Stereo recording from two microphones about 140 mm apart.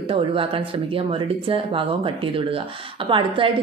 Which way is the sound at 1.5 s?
40° right (ahead or behind).